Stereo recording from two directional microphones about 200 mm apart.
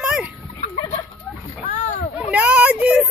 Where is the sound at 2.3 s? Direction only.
5° right (ahead or behind).